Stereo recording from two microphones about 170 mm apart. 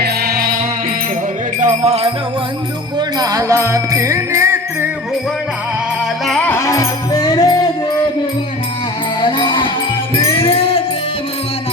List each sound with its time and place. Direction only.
0.0 s music: 65° right (ahead or behind)
1.6 s music: 40° right (ahead or behind)
3.2 s music: 20° right (ahead or behind)
6.5 s music: 20° left (ahead or behind)
9.2 s music: 25° left (ahead or behind)